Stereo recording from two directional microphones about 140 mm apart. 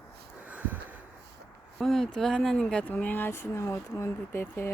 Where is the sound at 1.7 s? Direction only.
Centre (ahead or behind); by 4.7 s 15° left (ahead or behind).